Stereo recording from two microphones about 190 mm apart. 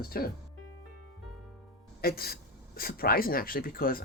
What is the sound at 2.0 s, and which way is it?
Speech, 55° left (ahead or behind).